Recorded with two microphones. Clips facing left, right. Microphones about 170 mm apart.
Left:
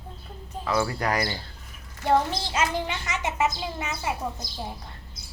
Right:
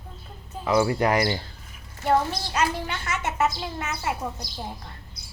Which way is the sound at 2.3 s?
25° left (ahead or behind).